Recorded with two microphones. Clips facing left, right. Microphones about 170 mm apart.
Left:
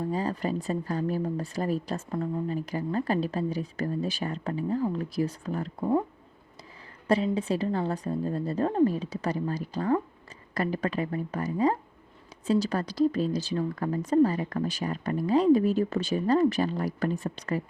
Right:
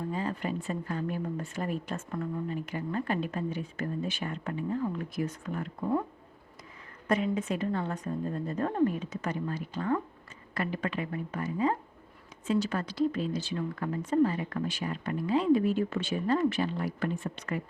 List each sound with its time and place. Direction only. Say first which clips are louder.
0.1 s speech: left 4 dB; 35° left (ahead or behind)
7.1 s speech: left 3 dB; 30° left (ahead or behind)